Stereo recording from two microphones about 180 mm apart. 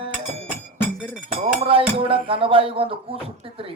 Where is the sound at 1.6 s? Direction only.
30° right (ahead or behind).